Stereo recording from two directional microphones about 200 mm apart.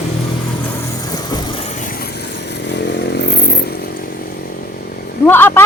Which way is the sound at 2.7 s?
55° left (ahead or behind).